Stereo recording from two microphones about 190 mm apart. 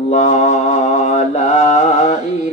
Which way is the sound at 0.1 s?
40° left (ahead or behind).